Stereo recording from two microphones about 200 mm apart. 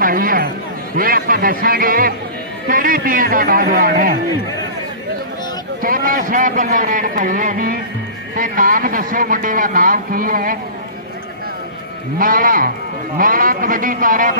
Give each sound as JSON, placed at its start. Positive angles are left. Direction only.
{"t": 0.0, "sound": "a sound", "side_deg": -45}
{"t": 0.9, "sound": "speech", "side_deg": -45}
{"t": 5.8, "sound": "speech", "side_deg": -45}
{"t": 12.2, "sound": "speech", "side_deg": -45}